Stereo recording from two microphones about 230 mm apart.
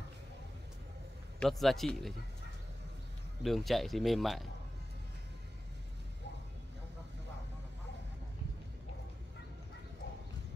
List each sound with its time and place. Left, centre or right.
1.4 s speech: centre
3.4 s speech: centre